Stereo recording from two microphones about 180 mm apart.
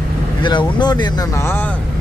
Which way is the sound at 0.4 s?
25° left (ahead or behind).